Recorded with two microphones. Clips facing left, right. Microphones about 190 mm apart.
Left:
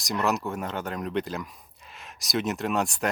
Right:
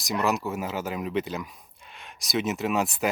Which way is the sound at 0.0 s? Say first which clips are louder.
Right 1 dB; centre (ahead or behind).